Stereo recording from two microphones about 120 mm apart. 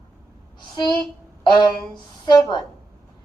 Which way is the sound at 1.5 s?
40° left (ahead or behind).